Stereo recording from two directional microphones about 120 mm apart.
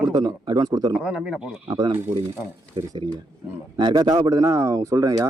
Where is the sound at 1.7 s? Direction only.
40° right (ahead or behind).